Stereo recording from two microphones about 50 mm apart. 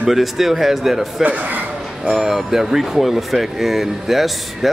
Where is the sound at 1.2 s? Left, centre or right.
Right.